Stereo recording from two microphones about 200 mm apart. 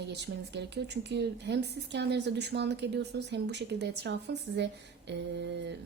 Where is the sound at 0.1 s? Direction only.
60° right (ahead or behind).